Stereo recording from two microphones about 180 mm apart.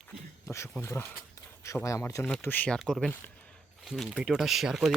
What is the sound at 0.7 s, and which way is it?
Speech, 10° left (ahead or behind).